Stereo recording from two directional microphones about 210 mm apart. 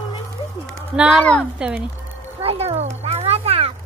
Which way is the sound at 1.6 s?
5° right (ahead or behind).